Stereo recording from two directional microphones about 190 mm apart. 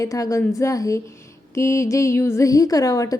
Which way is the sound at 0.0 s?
15° left (ahead or behind).